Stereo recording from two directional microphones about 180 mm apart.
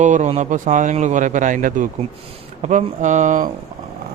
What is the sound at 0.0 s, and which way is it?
A man's voice, 40° right (ahead or behind).